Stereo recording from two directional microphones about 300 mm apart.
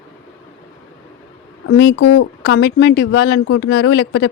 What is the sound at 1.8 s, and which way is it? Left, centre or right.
Speech, left.